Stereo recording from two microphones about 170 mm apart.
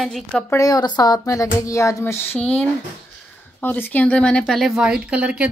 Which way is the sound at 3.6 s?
10° left (ahead or behind).